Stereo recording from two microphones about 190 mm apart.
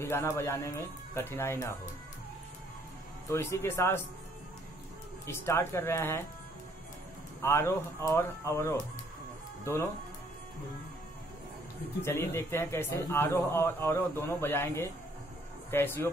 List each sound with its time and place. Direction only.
0.0 s a man's voice: 15° left (ahead or behind)
3.3 s a man's voice: 15° left (ahead or behind)
5.2 s a man's voice: 15° left (ahead or behind)
7.4 s a man's voice: 15° left (ahead or behind)
12.0 s a man's voice: 10° left (ahead or behind)